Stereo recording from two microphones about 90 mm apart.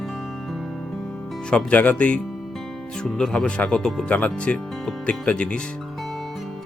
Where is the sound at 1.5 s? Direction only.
15° left (ahead or behind).